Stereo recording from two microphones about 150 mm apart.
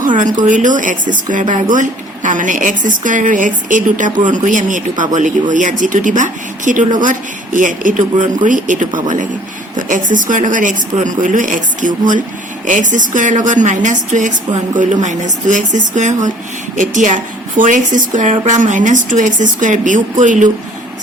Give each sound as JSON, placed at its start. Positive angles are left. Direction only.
{"t": 0.2, "sound": "speech", "side_deg": -60}